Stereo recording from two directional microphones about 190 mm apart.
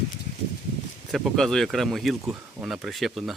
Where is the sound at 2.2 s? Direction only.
15° right (ahead or behind).